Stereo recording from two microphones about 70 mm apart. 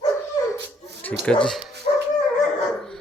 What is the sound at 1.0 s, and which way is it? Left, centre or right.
Speech, centre.